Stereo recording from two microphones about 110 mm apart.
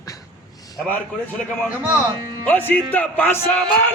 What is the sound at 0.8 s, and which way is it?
Speech, 15° left (ahead or behind).